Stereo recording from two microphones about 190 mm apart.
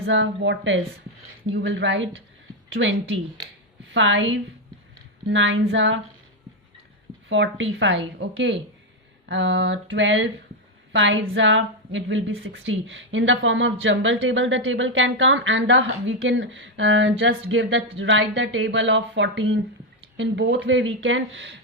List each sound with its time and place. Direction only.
0.0 s a woman's voice: 75° right (ahead or behind)
7.3 s a woman's voice: 80° right